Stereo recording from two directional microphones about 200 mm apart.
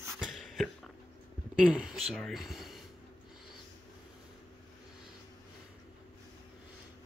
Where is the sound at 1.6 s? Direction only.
5° right (ahead or behind).